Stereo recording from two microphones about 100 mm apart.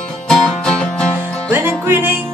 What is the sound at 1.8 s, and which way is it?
Music, 20° right (ahead or behind).